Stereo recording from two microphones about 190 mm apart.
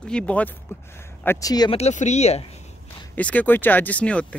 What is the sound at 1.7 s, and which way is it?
Speech, 35° left (ahead or behind).